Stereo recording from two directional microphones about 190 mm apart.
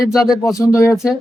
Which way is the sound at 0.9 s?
Centre (ahead or behind).